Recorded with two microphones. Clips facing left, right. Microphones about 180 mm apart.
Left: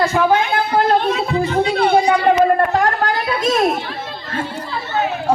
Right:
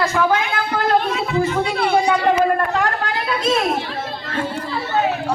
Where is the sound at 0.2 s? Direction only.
30° left (ahead or behind).